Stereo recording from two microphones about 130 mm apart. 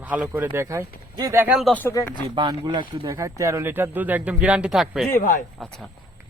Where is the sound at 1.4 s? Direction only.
5° right (ahead or behind).